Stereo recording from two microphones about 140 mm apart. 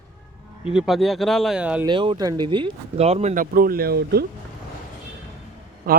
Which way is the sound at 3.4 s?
90° right.